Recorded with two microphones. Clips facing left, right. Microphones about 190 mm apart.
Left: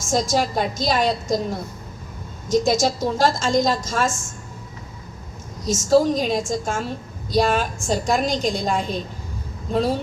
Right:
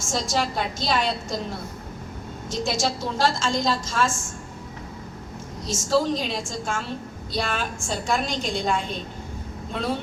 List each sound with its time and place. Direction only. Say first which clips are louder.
0.0 s a woman's voice: left 5 dB; 40° left (ahead or behind)
5.6 s a woman's voice: left 6 dB; 45° left (ahead or behind)